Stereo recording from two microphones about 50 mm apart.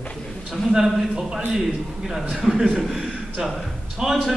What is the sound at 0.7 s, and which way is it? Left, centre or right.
A man's voice, centre.